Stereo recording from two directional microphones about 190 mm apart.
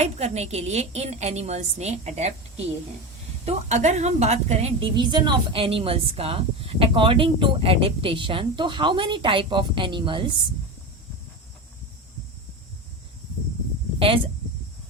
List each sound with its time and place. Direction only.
0.0 s a woman's voice: 35° right (ahead or behind)